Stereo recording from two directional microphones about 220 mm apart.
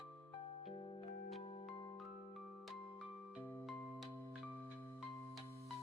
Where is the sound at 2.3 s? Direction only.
Centre (ahead or behind).